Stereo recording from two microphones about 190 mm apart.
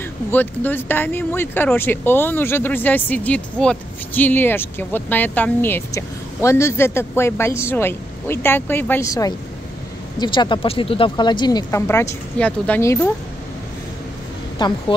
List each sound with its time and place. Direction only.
0.3 s speech: 10° left (ahead or behind)
14.6 s speech: 25° left (ahead or behind)